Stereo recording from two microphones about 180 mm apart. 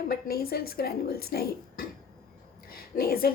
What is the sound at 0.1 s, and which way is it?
A woman's voice, 60° left (ahead or behind).